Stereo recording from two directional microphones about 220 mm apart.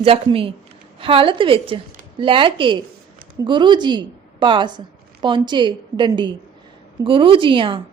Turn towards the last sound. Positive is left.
turn(degrees=-25)  # may be behind; listen again after turning